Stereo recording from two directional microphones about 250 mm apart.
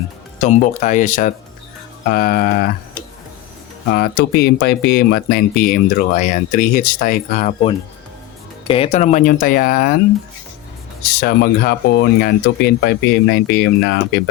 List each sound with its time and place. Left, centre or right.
0.3 s speech: left
3.9 s speech: left
11.2 s speech: left